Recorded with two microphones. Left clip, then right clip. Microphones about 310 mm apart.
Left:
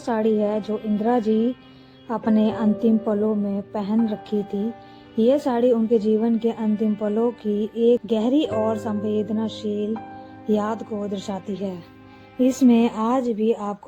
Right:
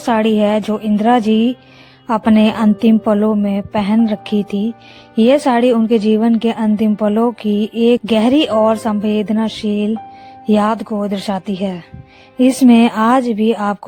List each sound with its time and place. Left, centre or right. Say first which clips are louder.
0.0 s a woman's voice: right 7 dB; right